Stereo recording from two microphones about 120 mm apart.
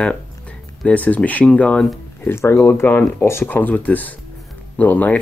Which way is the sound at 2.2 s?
20° left (ahead or behind).